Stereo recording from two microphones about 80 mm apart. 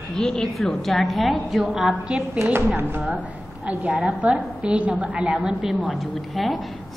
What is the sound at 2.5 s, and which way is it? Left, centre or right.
Speech, right.